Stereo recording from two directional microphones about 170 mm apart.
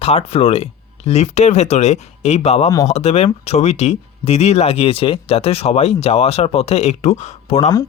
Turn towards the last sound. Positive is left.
turn(degrees=40)  # may be behind; listen again after turning